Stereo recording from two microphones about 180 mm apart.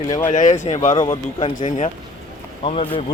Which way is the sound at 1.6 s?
45° left (ahead or behind).